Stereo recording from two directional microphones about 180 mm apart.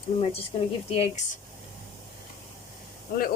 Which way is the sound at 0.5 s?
30° left (ahead or behind).